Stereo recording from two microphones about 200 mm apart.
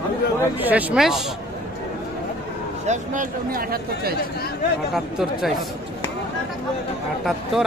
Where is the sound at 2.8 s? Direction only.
40° right (ahead or behind).